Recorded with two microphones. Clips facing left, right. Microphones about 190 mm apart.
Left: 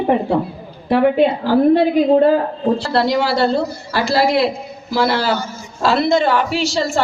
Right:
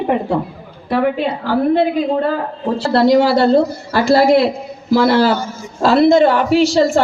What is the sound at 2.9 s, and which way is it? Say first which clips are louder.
A woman's voice: right 9 dB; 50° right (ahead or behind).